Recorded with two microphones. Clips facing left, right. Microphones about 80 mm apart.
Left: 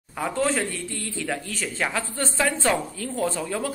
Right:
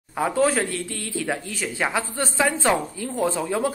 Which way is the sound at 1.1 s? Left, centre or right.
Centre.